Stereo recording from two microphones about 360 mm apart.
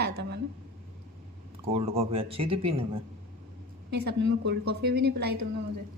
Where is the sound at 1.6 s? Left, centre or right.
Centre.